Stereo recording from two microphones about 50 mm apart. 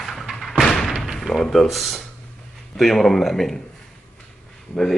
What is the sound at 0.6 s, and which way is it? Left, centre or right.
Thump, centre.